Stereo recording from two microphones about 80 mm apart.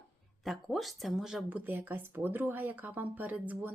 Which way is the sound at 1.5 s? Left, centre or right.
Right.